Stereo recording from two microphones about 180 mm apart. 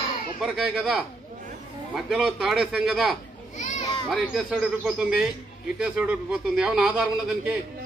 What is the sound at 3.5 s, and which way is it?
Children playing, 40° left (ahead or behind).